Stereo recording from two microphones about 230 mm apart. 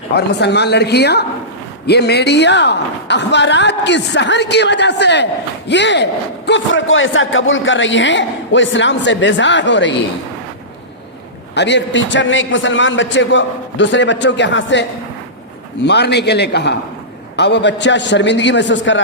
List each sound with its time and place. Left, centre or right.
0.2 s speech: left
11.5 s speech: left